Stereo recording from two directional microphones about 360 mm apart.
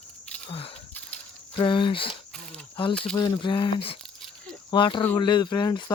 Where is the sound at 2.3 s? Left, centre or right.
Centre.